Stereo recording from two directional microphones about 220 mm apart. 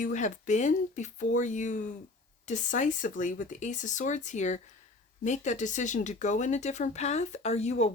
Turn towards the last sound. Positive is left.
turn(degrees=30)  # may be behind; listen again after turning